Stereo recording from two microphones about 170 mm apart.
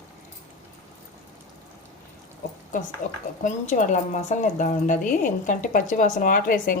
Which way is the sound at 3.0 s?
45° left (ahead or behind).